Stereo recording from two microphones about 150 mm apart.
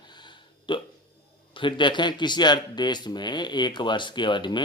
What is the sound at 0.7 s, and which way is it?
Burping, 35° left (ahead or behind).